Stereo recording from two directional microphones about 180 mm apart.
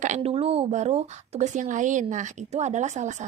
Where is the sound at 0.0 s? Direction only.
40° right (ahead or behind).